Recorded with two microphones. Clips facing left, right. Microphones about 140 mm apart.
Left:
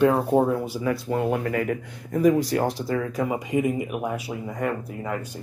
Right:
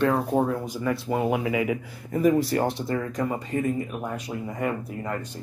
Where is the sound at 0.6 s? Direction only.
5° left (ahead or behind).